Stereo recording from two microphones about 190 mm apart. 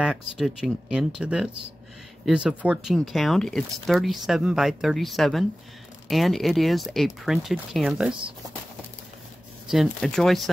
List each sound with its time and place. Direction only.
0.0 s speech: centre (ahead or behind)
9.7 s speech: centre (ahead or behind)